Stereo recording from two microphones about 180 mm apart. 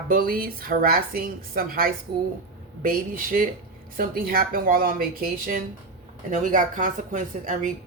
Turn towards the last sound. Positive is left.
turn(degrees=-45)  # may be behind; listen again after turning